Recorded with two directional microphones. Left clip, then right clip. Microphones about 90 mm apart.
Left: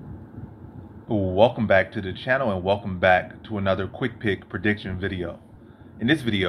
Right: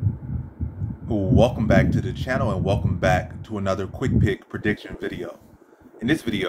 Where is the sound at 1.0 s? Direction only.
50° right (ahead or behind).